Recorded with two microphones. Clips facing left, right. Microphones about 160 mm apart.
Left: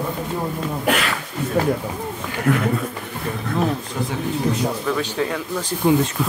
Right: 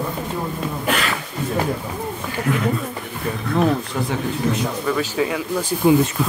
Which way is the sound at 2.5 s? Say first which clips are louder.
Left 3 dB; 70° left (ahead or behind).